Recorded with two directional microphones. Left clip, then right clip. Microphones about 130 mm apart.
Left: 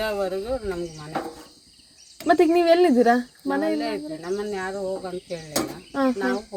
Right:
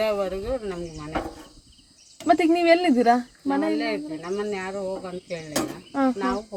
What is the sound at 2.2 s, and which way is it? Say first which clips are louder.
Speech: left 1 dB; 60° left (ahead or behind).